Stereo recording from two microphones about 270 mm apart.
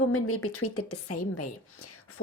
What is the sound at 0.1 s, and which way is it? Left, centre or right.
Speech, left.